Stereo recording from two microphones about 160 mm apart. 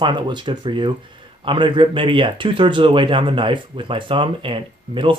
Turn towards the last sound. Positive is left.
turn(degrees=-30)  # may be behind; listen again after turning